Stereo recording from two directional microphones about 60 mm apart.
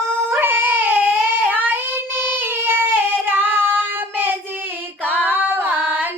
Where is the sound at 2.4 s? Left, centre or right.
Right.